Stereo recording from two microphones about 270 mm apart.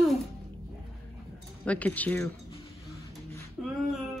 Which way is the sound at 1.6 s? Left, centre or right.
Centre.